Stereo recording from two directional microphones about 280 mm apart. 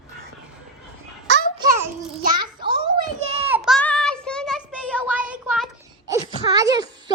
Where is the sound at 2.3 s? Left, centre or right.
Centre.